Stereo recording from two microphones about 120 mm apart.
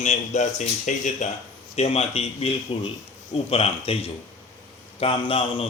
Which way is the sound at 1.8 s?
60° left (ahead or behind).